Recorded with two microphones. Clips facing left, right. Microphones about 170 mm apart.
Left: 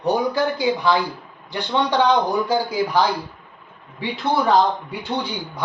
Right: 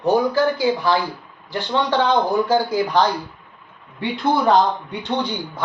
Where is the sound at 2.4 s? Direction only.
10° left (ahead or behind).